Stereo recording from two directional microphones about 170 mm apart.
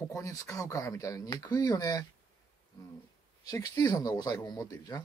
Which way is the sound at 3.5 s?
20° left (ahead or behind).